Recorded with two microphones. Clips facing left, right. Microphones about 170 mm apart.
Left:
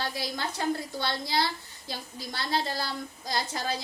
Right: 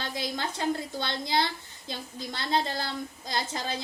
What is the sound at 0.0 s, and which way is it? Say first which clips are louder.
Speech: even; 20° right (ahead or behind).